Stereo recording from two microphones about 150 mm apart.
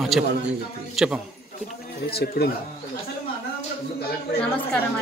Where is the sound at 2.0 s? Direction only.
90° left.